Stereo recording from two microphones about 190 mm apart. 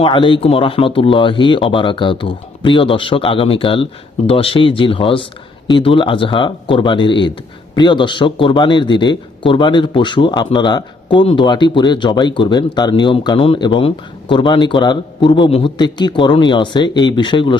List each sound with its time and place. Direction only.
0.0 s speech: 25° left (ahead or behind)